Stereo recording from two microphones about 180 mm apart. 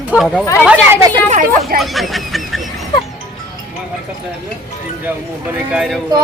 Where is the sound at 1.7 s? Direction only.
Centre (ahead or behind).